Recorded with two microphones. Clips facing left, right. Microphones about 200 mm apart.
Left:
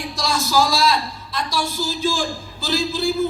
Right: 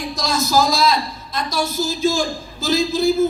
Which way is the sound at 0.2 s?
40° right (ahead or behind).